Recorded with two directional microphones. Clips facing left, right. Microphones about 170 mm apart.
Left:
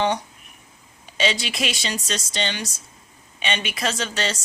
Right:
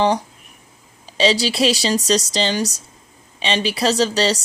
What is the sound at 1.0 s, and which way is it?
A woman's voice, 30° right (ahead or behind).